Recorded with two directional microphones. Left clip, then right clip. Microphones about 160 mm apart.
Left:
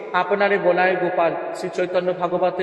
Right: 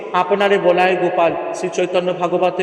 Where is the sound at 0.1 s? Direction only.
30° right (ahead or behind).